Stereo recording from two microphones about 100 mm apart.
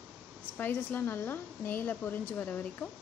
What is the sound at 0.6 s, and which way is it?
A woman's voice, 20° left (ahead or behind).